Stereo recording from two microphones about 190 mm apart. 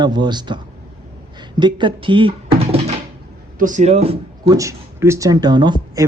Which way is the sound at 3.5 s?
40° right (ahead or behind).